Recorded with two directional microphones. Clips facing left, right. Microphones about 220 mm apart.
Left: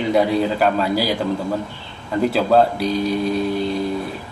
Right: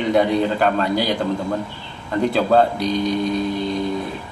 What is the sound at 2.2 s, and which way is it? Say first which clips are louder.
Speech: left 1 dB; 5° left (ahead or behind).